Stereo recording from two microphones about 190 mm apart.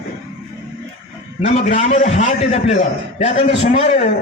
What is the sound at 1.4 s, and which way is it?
A man's voice, 35° left (ahead or behind).